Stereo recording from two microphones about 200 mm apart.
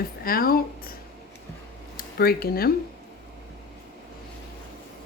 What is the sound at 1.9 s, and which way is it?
Speech, 50° left (ahead or behind).